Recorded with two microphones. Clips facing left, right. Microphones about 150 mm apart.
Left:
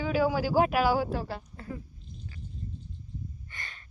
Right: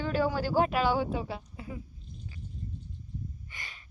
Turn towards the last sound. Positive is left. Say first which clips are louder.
# left 2 dB
turn(degrees=-10)  # may be behind; listen again after turning